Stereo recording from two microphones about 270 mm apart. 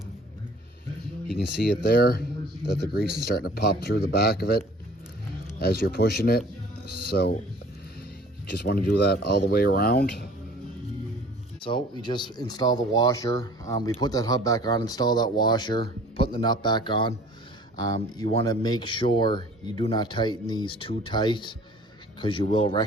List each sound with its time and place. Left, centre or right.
1.4 s speech: left
3.2 s speech: left
8.4 s speech: left
11.6 s speech: centre